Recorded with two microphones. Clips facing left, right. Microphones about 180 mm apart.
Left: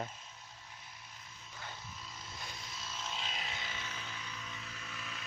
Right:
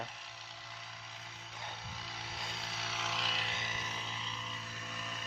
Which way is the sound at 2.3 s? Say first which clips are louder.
Right 4 dB; 70° right (ahead or behind).